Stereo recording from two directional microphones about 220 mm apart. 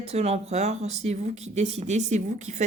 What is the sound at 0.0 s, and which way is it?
Speech, 30° right (ahead or behind).